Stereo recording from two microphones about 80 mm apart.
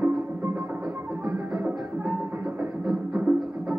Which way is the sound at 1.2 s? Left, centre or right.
Centre.